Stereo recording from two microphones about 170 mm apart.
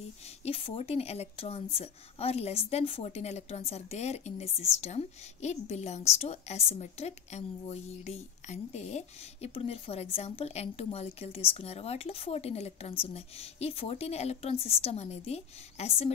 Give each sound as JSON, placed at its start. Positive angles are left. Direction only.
{"t": 0.4, "sound": "speech", "side_deg": 35}